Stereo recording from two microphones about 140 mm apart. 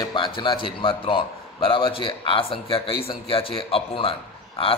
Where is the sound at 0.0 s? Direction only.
35° left (ahead or behind).